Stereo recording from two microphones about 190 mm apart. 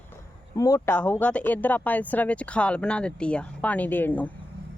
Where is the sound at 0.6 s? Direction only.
15° left (ahead or behind).